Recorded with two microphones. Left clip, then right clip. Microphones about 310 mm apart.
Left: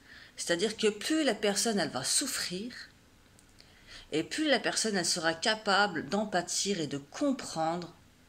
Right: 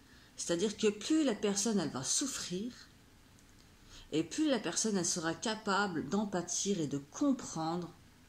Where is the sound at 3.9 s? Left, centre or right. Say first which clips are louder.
Left 3 dB; centre.